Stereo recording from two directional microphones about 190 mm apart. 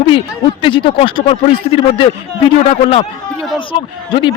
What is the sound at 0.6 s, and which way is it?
A man's voice, 25° left (ahead or behind).